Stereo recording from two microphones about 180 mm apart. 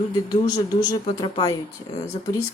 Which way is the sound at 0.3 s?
20° left (ahead or behind).